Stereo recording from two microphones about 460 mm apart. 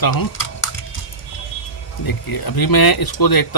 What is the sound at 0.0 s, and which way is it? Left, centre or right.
Speech, left.